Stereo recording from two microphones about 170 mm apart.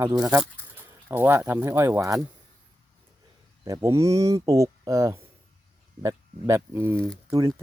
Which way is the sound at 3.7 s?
15° right (ahead or behind).